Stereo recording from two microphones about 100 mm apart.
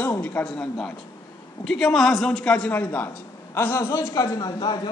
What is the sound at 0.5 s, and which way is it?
A man's voice, 5° left (ahead or behind).